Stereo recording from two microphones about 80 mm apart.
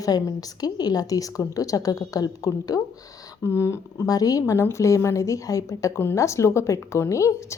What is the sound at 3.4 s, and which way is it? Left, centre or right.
Speech, left.